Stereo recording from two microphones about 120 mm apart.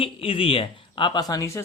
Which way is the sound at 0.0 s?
50° left (ahead or behind).